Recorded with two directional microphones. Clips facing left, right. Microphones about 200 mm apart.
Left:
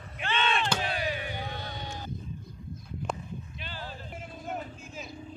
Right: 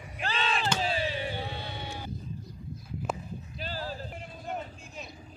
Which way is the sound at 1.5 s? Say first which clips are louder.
Even; 10° right (ahead or behind).